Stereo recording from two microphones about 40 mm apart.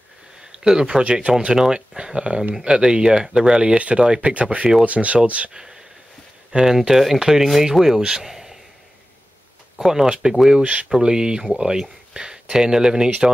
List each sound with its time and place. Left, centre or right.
0.4 s speech: centre
4.3 s speech: right
5.5 s speech: centre
10.0 s speech: right
10.3 s speech: centre
10.6 s speech: right
11.0 s speech: right